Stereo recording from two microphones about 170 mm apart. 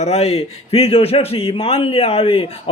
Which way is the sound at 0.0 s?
40° left (ahead or behind).